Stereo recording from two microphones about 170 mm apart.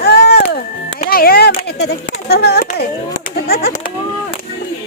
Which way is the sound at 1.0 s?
60° left (ahead or behind).